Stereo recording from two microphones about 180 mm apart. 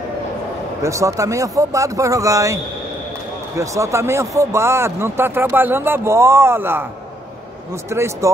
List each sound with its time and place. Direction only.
0.8 s speech: 15° right (ahead or behind)